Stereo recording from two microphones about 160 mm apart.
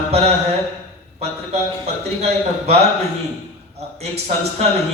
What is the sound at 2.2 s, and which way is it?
A man's voice, 40° right (ahead or behind).